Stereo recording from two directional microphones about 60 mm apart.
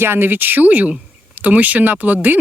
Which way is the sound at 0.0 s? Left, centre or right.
Right.